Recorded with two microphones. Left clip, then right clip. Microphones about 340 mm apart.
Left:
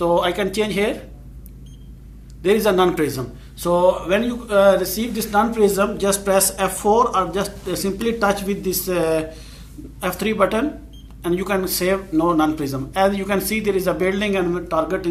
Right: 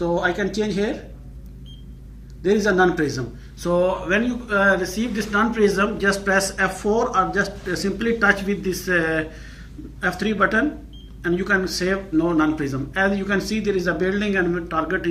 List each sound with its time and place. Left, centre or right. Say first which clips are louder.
0.5 s speech: left 3 dB; left
2.4 s speech: left 2 dB; centre